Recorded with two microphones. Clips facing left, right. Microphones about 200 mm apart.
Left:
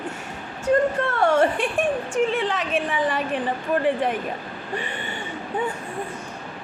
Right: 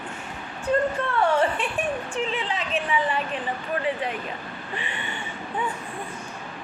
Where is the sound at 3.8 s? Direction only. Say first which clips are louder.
Left 6 dB; 50° left (ahead or behind).